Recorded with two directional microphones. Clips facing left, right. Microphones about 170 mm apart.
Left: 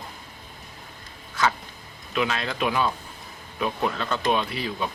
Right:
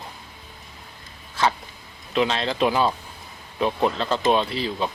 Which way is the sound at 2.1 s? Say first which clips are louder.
Right 4 dB; 30° right (ahead or behind).